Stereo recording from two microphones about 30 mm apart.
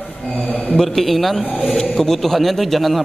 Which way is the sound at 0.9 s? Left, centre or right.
Centre.